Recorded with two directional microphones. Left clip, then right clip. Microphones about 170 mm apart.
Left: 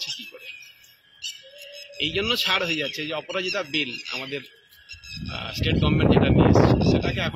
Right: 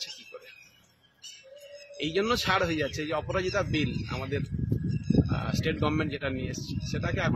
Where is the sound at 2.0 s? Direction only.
10° right (ahead or behind).